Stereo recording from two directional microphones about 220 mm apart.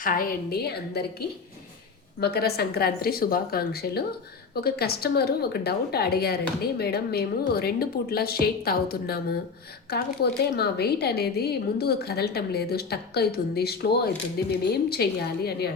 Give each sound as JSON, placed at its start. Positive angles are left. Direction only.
{"t": 0.0, "sound": "a woman's voice", "side_deg": 40}
{"t": 2.2, "sound": "a woman's voice", "side_deg": 45}